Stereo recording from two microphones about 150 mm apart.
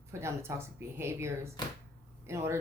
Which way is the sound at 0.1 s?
15° right (ahead or behind).